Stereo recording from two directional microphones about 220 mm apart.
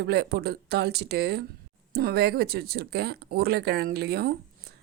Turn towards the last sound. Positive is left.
turn(degrees=-45)  # may be behind; listen again after turning